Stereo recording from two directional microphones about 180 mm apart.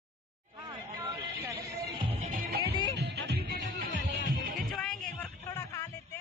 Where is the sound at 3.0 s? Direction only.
70° right (ahead or behind).